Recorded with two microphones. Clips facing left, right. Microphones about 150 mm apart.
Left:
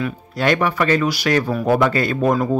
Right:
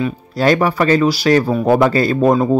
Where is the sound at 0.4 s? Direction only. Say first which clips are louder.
Right 4 dB; 35° right (ahead or behind).